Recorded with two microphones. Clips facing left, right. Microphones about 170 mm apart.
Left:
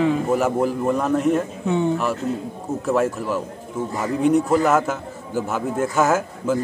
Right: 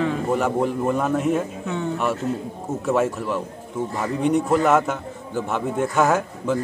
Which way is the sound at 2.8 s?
Centre (ahead or behind).